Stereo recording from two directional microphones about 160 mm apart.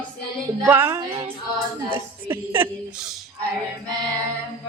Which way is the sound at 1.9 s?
15° right (ahead or behind).